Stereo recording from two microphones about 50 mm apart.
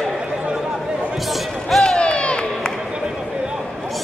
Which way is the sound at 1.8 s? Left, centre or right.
Centre.